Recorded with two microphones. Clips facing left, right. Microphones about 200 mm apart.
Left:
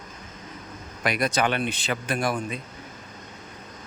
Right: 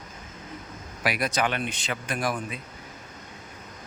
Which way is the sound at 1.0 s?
5° right (ahead or behind).